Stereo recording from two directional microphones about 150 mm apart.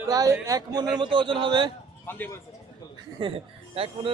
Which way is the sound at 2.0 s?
15° left (ahead or behind).